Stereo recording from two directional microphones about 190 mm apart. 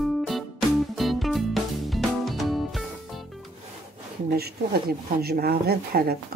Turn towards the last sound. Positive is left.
turn(degrees=-55)  # may be behind; listen again after turning